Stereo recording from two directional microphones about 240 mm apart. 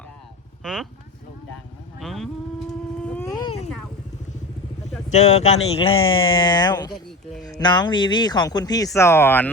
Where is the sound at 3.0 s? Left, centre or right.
Centre.